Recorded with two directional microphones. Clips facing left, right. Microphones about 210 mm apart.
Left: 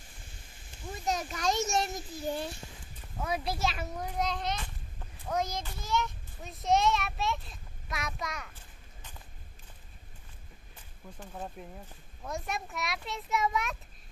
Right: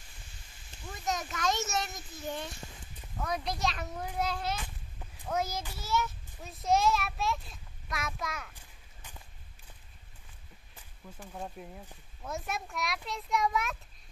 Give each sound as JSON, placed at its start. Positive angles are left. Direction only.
{"t": 1.0, "sound": "a sound", "side_deg": 35}
{"t": 1.8, "sound": "a child's voice", "side_deg": 35}
{"t": 3.2, "sound": "a child's voice", "side_deg": 5}
{"t": 11.6, "sound": "a child's voice", "side_deg": 0}